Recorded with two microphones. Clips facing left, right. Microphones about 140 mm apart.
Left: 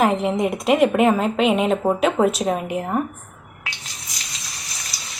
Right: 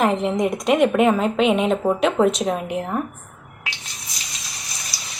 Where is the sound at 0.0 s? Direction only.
Centre (ahead or behind).